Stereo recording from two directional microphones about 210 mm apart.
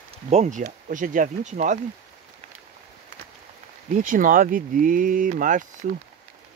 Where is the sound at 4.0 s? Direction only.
40° right (ahead or behind).